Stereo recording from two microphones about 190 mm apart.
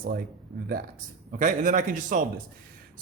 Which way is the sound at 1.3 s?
45° right (ahead or behind).